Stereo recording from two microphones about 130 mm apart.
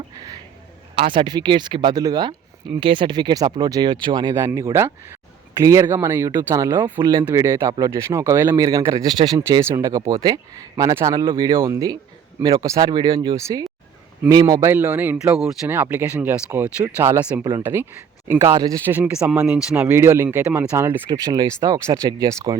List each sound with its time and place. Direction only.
0.9 s speech: 40° right (ahead or behind)
11.6 s speech: 25° right (ahead or behind)
13.3 s speech: 25° right (ahead or behind)
14.6 s speech: 15° right (ahead or behind)
18.9 s speech: 15° right (ahead or behind)